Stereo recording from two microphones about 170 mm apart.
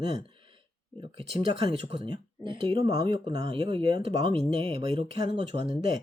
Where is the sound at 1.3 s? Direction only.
30° right (ahead or behind).